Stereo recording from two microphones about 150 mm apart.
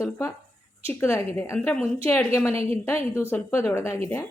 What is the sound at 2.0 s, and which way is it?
Speech, 15° left (ahead or behind).